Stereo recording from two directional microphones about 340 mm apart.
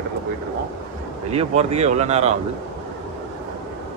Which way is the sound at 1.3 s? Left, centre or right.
Centre.